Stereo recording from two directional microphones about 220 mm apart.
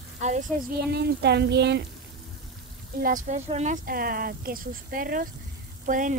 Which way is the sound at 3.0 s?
35° right (ahead or behind).